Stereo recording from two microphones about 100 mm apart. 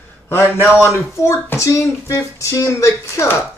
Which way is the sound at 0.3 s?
25° left (ahead or behind).